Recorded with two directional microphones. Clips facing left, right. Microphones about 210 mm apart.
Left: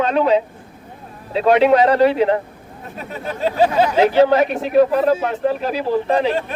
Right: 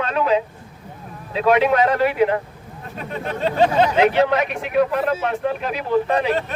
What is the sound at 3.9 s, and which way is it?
Speech, 30° left (ahead or behind).